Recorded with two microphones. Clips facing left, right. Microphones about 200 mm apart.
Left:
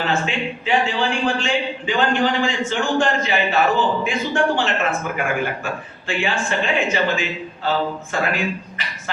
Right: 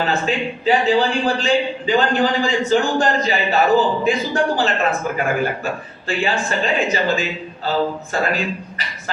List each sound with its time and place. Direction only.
0.0 s a man's voice: 35° right (ahead or behind)